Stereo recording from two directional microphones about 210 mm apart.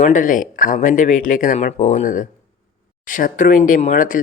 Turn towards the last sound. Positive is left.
turn(degrees=40)  # may be behind; listen again after turning